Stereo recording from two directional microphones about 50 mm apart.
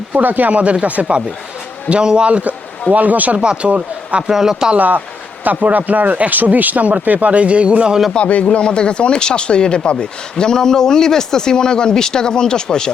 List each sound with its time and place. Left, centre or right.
0.1 s speech: right
3.4 s speech: right
4.3 s speech: centre
4.8 s speech: right
8.1 s speech: left